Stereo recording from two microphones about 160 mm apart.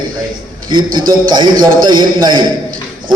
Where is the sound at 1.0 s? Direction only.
25° right (ahead or behind).